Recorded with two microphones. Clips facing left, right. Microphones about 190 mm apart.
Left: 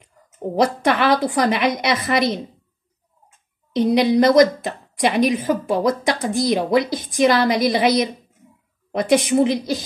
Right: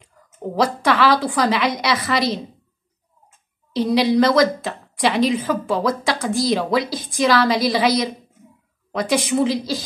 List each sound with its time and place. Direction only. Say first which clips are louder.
0.6 s a woman's voice: even; 20° left (ahead or behind)
3.7 s a woman's voice: left 1 dB; 20° left (ahead or behind)
9.1 s a woman's voice: left 3 dB; 20° left (ahead or behind)